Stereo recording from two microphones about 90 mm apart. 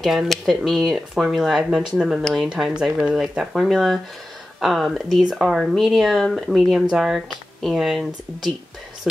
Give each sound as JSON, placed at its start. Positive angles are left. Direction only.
{"t": 0.0, "sound": "speech", "side_deg": 0}